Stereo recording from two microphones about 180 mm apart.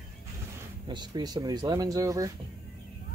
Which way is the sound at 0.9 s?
25° right (ahead or behind).